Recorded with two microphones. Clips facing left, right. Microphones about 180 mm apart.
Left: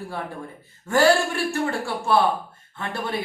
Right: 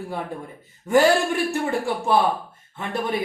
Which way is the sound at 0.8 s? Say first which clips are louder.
Right 1 dB; 20° right (ahead or behind).